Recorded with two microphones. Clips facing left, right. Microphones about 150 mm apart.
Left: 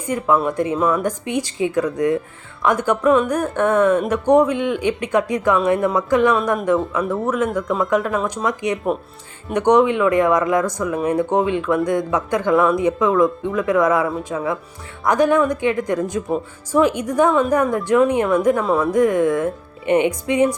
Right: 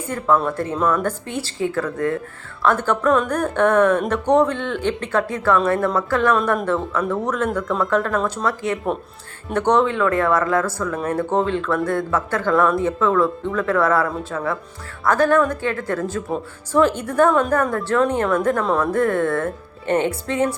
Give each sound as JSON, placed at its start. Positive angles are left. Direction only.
{"t": 0.0, "sound": "a woman's voice", "side_deg": 10}